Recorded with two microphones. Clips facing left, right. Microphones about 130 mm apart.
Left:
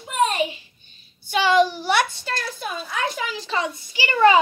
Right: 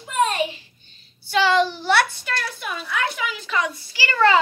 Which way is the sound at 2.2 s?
40° left (ahead or behind).